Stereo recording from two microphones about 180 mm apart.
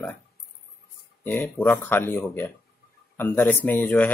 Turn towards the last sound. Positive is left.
turn(degrees=10)  # may be behind; listen again after turning